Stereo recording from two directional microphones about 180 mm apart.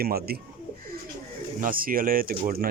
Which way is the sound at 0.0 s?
60° right (ahead or behind).